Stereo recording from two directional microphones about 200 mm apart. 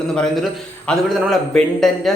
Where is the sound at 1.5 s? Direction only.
Centre (ahead or behind).